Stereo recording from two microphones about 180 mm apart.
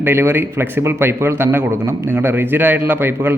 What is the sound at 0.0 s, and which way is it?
A man's voice, 15° right (ahead or behind).